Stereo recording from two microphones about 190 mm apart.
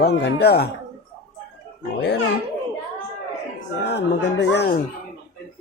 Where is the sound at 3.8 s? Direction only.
60° left (ahead or behind).